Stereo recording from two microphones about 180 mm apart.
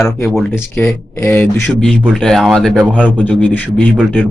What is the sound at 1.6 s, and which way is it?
A man's voice, centre (ahead or behind).